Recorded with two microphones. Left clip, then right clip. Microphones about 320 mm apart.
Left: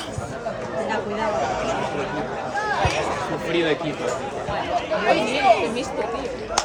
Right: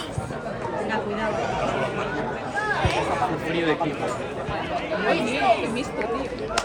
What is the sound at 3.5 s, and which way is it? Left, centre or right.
Speech, left.